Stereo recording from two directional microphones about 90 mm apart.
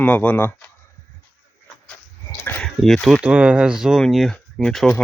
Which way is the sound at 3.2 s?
15° right (ahead or behind).